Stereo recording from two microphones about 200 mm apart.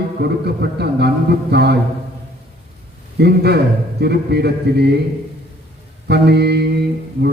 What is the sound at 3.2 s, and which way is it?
Speech, 55° right (ahead or behind).